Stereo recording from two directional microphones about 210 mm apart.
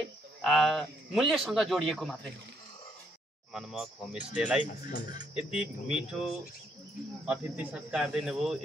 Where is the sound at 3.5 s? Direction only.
5° right (ahead or behind).